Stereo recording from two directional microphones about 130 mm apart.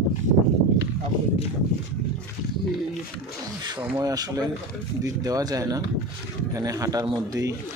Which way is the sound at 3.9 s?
30° right (ahead or behind).